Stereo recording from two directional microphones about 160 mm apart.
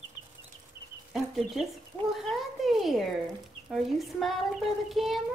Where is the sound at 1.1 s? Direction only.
Centre (ahead or behind).